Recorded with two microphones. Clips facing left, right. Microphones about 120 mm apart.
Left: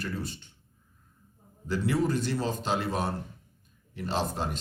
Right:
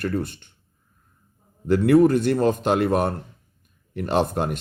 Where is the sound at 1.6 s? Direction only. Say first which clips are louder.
Right 12 dB; 60° right (ahead or behind).